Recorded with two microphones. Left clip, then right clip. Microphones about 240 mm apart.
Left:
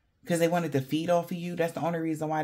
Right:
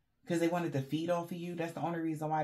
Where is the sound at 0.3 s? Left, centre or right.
Left.